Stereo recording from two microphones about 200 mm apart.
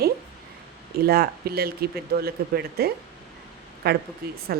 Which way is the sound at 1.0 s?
50° right (ahead or behind).